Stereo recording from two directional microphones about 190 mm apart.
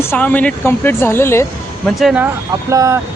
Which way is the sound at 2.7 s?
15° right (ahead or behind).